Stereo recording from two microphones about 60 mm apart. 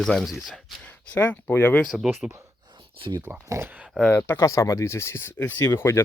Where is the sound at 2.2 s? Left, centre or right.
Centre.